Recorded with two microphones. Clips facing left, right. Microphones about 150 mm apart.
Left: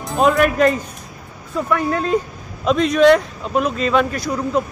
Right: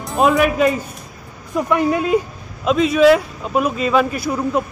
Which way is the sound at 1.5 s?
15° right (ahead or behind).